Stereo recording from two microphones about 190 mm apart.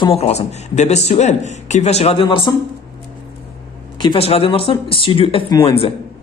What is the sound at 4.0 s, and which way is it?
Speech, 30° left (ahead or behind).